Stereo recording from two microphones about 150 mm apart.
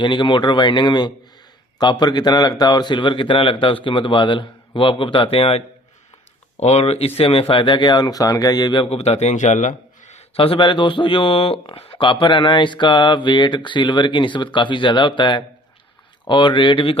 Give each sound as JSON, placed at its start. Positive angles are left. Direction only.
{"t": 0.0, "sound": "speech", "side_deg": 30}
{"t": 10.3, "sound": "speech", "side_deg": 35}